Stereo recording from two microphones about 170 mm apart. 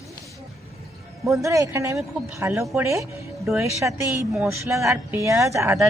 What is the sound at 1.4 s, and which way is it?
A woman's voice, 20° right (ahead or behind).